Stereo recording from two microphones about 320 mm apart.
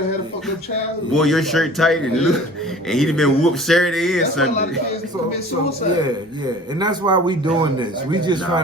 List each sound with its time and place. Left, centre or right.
1.1 s speech: centre
6.7 s speech: centre